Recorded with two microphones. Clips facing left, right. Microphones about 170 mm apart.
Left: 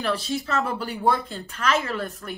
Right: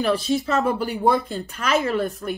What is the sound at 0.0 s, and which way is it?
A woman's voice, 15° right (ahead or behind).